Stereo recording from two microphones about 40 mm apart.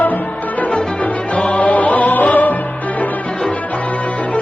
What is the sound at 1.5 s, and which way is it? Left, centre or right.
Music, left.